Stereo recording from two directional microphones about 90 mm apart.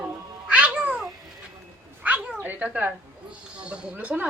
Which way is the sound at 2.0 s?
15° right (ahead or behind).